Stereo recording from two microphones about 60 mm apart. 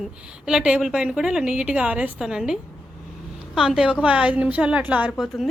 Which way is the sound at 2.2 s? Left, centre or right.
Centre.